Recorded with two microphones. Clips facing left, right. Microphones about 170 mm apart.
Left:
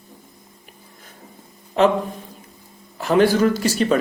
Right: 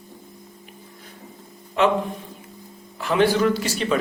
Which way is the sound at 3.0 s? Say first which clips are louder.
Left 3 dB; 40° left (ahead or behind).